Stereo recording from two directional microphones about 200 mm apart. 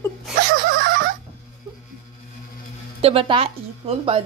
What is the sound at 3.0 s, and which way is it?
A woman's voice, 30° right (ahead or behind).